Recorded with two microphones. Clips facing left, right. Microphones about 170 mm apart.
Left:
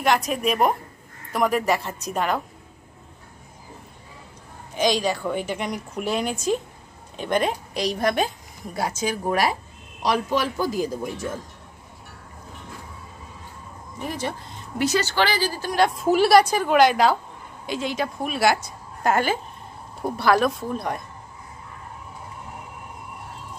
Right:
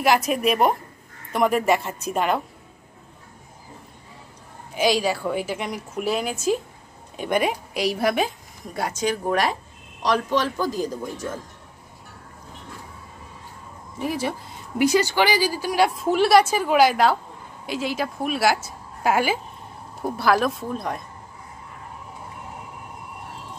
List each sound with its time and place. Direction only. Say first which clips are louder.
0.0 s a woman's voice: right 2 dB; 5° right (ahead or behind)
4.7 s a woman's voice: right 1 dB; 5° right (ahead or behind); by 11.2 s 10° left (ahead or behind)
13.9 s a woman's voice: right 3 dB; 5° right (ahead or behind)
16.1 s a woman's voice: left 1 dB; centre (ahead or behind)